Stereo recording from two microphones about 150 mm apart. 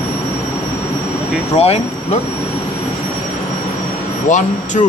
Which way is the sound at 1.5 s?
45° left (ahead or behind).